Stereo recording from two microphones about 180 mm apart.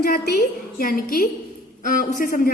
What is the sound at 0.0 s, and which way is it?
A woman's voice, 55° left (ahead or behind).